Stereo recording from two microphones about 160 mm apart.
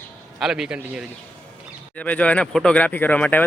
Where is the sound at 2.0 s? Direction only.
10° left (ahead or behind).